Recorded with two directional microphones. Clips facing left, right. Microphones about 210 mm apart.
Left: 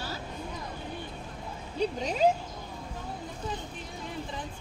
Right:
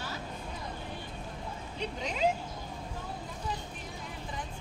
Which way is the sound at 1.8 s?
35° left (ahead or behind).